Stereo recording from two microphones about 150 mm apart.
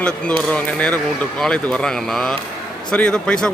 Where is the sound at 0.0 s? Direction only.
5° left (ahead or behind).